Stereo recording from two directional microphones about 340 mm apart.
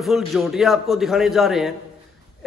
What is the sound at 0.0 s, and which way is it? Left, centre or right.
A man's voice, centre.